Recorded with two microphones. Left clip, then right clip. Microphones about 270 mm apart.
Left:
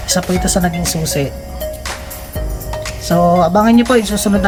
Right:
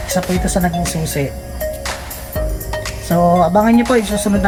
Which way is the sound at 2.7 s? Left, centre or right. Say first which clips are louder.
Left 3 dB; centre.